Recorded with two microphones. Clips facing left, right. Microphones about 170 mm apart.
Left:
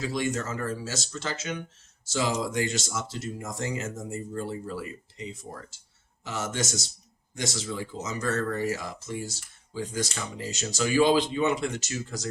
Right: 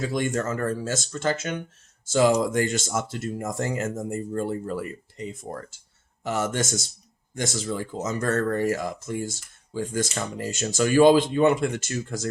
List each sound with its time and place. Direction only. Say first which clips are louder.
0.0 s speech: right 3 dB; 50° right (ahead or behind)